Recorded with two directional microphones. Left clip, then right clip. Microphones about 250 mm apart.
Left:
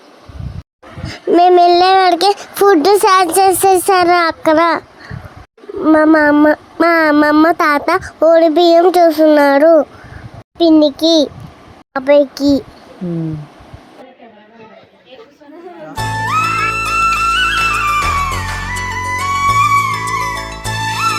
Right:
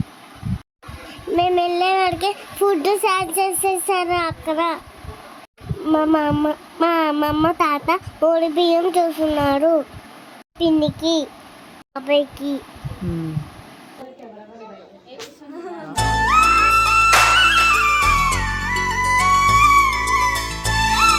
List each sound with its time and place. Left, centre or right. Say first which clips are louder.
1.3 s a child's voice: left 11 dB; left
5.8 s a child's voice: left 9 dB; left
15.9 s music: even; centre